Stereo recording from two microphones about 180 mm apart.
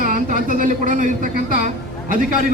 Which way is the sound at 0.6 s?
45° right (ahead or behind).